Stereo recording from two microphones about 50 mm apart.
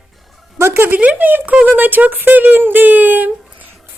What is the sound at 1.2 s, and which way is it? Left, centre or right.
Speech, right.